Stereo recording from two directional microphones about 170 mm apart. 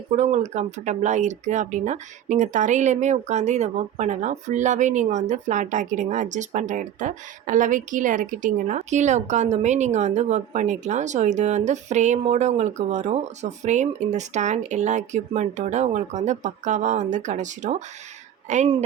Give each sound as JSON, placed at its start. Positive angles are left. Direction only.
{"t": 0.2, "sound": "speech", "side_deg": -40}